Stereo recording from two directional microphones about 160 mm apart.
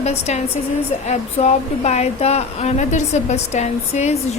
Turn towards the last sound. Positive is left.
turn(degrees=45)  # may be behind; listen again after turning